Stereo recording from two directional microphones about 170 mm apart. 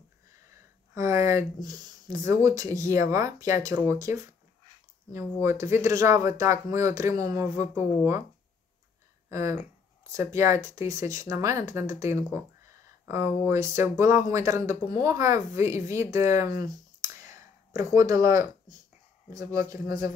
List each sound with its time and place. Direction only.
0.9 s speech: 15° right (ahead or behind)
9.3 s speech: 15° right (ahead or behind)